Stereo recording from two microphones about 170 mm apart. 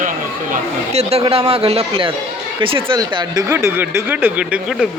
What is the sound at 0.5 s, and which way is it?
A man's voice, 40° right (ahead or behind).